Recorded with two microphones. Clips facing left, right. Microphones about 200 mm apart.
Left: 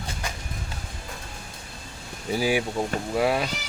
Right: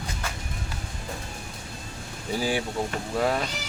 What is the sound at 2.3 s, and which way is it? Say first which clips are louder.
Vehicle: left 3 dB; 10° left (ahead or behind).